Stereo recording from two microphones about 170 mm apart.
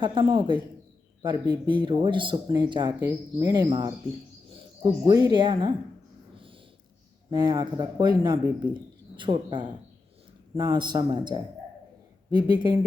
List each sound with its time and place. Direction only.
0.0 s speech: 30° right (ahead or behind)
6.3 s a sound: 30° right (ahead or behind)
7.3 s speech: 25° right (ahead or behind)